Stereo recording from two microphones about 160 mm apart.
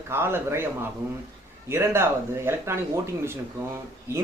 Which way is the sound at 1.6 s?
15° right (ahead or behind).